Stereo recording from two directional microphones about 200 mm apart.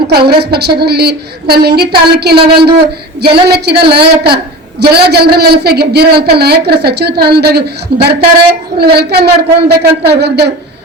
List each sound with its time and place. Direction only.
0.1 s a woman's voice: 55° right (ahead or behind)